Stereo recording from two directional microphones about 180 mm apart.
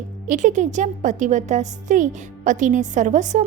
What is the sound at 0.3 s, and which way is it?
A woman's voice, 45° right (ahead or behind).